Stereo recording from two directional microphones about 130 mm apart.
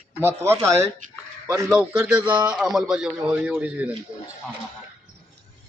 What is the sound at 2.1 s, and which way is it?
A man's voice, 10° right (ahead or behind).